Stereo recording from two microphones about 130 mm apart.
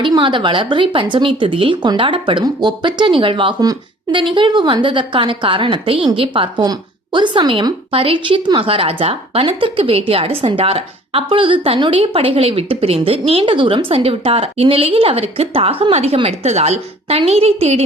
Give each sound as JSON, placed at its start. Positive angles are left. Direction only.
{"t": 0.0, "sound": "a woman's voice", "side_deg": -40}